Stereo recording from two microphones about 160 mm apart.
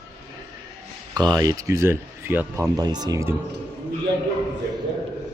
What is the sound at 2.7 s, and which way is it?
Speech, 25° right (ahead or behind).